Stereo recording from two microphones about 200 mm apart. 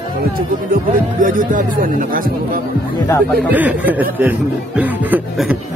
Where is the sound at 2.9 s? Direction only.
15° left (ahead or behind).